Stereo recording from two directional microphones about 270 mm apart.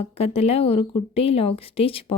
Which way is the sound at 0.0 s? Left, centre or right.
Left.